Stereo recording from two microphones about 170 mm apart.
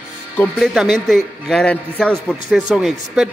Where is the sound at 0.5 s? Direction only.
Centre (ahead or behind).